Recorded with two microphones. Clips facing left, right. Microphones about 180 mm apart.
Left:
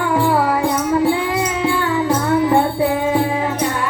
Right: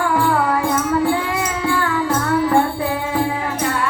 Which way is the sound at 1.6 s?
20° left (ahead or behind).